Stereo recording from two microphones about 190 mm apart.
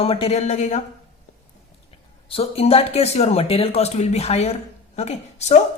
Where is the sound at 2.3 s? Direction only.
30° left (ahead or behind).